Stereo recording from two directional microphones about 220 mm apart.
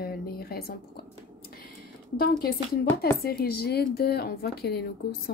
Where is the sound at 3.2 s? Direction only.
45° left (ahead or behind).